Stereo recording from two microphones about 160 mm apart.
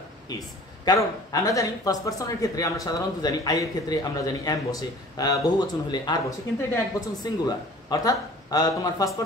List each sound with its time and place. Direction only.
0.8 s speech: 20° left (ahead or behind)